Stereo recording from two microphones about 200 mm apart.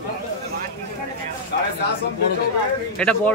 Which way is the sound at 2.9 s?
5° left (ahead or behind).